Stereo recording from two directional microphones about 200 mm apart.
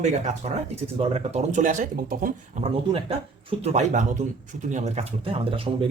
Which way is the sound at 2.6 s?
30° right (ahead or behind).